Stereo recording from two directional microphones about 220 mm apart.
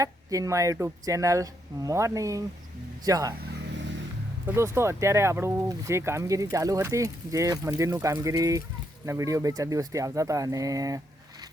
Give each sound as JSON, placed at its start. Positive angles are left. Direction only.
{"t": 0.0, "sound": "speech", "side_deg": -15}
{"t": 4.4, "sound": "speech", "side_deg": -10}